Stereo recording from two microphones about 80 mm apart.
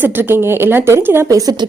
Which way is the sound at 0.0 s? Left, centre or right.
Right.